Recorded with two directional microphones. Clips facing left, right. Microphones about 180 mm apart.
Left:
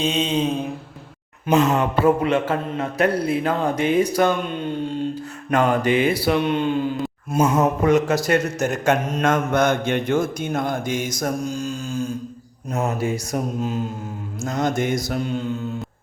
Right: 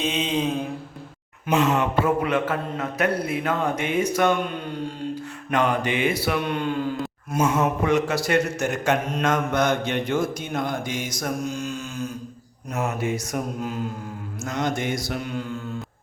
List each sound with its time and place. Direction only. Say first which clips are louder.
0.0 s mantra: left 3 dB; 30° left (ahead or behind)
1.5 s a man's voice: left 3 dB; 40° left (ahead or behind)
5.5 s a man's voice: left 4 dB; 40° left (ahead or behind); by 7.4 s 20° left (ahead or behind)
7.4 s speech: left 4 dB; 35° left (ahead or behind)
11.2 s mantra: left 3 dB; 35° left (ahead or behind)
12.7 s a man's voice: left 3 dB; 35° left (ahead or behind)
14.4 s a man's voice: left 4 dB; 40° left (ahead or behind)